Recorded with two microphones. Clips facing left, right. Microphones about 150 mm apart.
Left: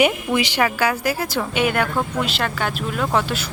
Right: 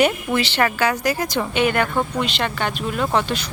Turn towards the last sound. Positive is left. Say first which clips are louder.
# even
turn(degrees=5)  # may be behind; listen again after turning